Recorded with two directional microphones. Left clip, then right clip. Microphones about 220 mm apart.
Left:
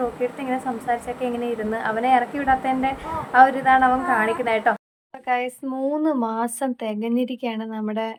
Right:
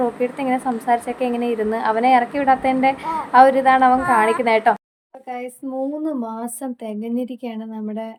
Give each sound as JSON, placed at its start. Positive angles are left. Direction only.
{"t": 0.2, "sound": "a woman's voice", "side_deg": -20}
{"t": 6.0, "sound": "a woman's voice", "side_deg": -5}